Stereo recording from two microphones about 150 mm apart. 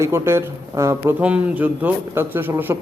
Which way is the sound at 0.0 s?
15° right (ahead or behind).